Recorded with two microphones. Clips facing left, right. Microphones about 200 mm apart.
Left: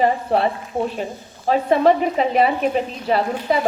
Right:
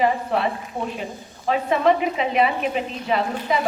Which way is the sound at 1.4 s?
35° left (ahead or behind).